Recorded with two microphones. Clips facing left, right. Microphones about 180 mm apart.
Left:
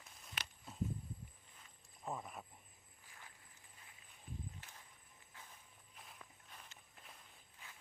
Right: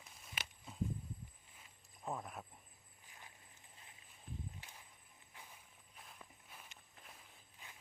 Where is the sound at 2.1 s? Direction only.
Centre (ahead or behind).